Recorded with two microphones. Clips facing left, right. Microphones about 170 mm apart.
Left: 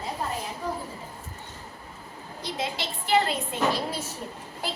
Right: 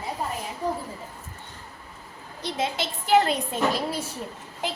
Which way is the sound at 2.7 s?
45° right (ahead or behind).